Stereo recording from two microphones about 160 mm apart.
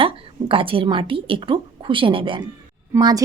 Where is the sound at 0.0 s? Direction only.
35° right (ahead or behind).